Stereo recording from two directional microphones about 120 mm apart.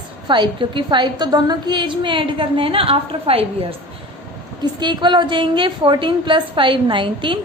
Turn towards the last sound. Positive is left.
turn(degrees=-40)  # may be behind; listen again after turning